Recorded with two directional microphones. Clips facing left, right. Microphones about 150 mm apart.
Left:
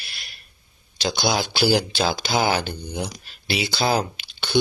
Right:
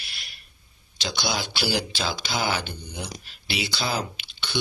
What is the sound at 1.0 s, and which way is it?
Speech, 45° left (ahead or behind).